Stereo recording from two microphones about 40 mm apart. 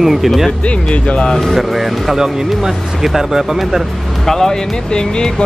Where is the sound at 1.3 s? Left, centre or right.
Centre.